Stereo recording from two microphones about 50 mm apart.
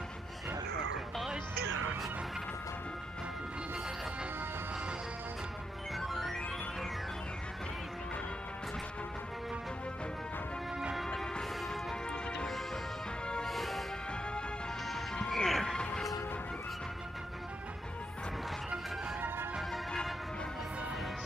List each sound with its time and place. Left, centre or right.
5.9 s music: centre
11.0 s music: centre
12.1 s music: centre
13.4 s music: centre
15.1 s music: centre
19.7 s music: centre